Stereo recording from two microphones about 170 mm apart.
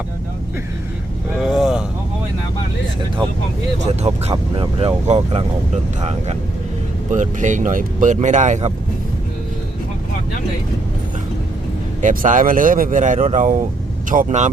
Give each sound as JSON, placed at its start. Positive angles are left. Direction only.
{"t": 1.4, "sound": "vehicle", "side_deg": -5}
{"t": 4.1, "sound": "speech", "side_deg": -35}
{"t": 12.0, "sound": "speech", "side_deg": -50}